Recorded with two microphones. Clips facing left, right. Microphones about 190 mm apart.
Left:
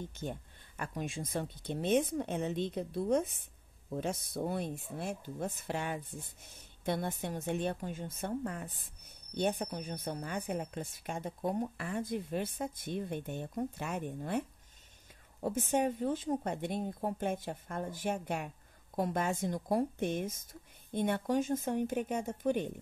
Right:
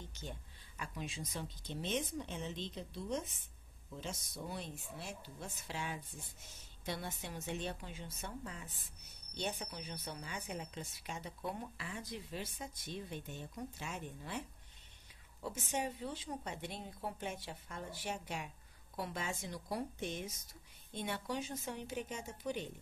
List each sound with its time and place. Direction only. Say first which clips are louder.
0.0 s a woman's voice: left 9 dB; 55° left (ahead or behind)
15.4 s a woman's voice: left 9 dB; 50° left (ahead or behind)